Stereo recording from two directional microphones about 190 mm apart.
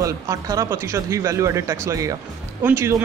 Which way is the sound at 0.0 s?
15° right (ahead or behind).